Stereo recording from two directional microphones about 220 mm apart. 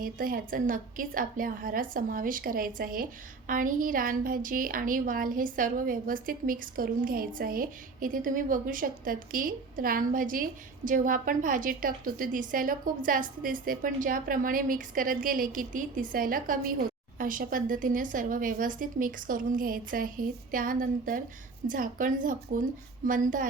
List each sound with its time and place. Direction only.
0.0 s a woman's voice: 40° right (ahead or behind)